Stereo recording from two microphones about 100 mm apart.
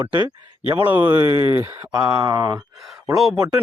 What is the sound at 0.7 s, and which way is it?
Speech, 20° right (ahead or behind).